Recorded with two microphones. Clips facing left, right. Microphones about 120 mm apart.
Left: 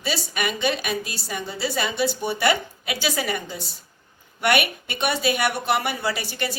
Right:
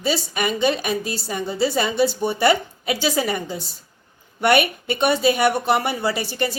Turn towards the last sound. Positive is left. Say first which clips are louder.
# right 4 dB
turn(degrees=-30)  # may be behind; listen again after turning